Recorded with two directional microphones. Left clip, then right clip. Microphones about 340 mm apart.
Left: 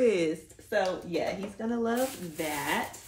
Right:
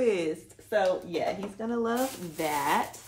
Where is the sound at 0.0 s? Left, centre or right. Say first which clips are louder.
Left 1 dB; centre.